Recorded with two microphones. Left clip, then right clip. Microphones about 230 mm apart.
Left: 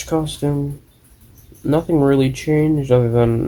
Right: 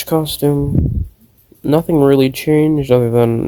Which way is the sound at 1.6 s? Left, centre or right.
Right.